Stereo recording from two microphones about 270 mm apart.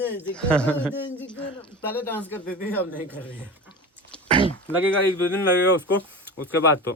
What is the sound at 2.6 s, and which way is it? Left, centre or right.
Speech, centre.